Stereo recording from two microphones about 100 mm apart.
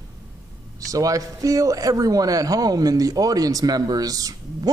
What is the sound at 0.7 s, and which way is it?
Speech, 35° right (ahead or behind).